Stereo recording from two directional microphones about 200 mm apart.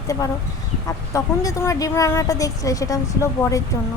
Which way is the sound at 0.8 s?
15° left (ahead or behind).